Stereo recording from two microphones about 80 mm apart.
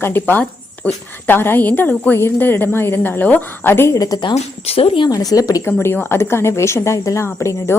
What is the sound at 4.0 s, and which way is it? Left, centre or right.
A woman's voice, left.